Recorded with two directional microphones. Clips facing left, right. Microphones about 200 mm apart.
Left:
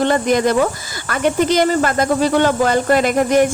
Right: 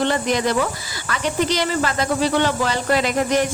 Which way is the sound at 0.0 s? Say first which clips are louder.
Left 5 dB; 50° left (ahead or behind).